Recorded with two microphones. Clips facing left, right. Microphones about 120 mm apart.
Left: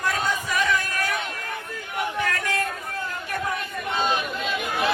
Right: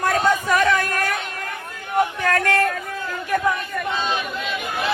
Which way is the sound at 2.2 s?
60° right (ahead or behind).